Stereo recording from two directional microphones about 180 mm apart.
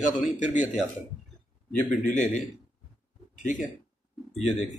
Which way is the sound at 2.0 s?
45° left (ahead or behind).